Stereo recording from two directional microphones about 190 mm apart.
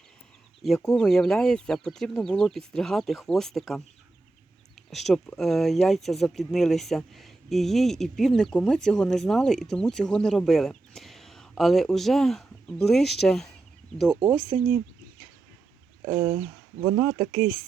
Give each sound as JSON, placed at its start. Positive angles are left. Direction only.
{"t": 0.6, "sound": "speech", "side_deg": 0}
{"t": 4.9, "sound": "speech", "side_deg": 0}
{"t": 16.0, "sound": "speech", "side_deg": -10}